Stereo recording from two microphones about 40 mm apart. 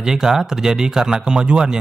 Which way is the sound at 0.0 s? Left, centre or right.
Centre.